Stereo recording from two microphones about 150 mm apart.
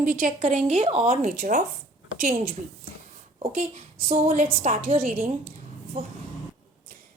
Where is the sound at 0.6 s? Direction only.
45° right (ahead or behind); by 2.5 s 70° right (ahead or behind).